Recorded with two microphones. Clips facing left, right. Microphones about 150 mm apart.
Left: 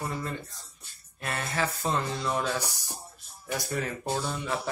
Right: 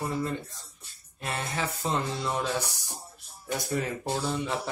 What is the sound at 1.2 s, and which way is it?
Speech, 20° right (ahead or behind).